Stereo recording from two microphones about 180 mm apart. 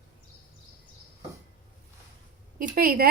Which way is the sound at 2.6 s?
55° right (ahead or behind).